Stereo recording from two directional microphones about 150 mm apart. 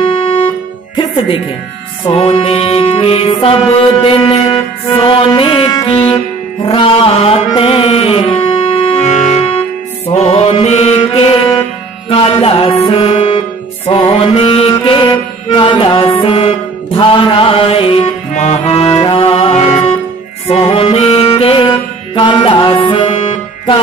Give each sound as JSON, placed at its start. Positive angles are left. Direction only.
{"t": 0.0, "sound": "music", "side_deg": 35}
{"t": 18.3, "sound": "music", "side_deg": 50}